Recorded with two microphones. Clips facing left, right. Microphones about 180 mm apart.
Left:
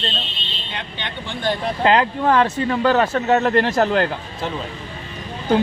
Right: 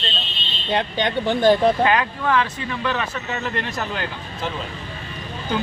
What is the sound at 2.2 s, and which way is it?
Speech, 45° left (ahead or behind).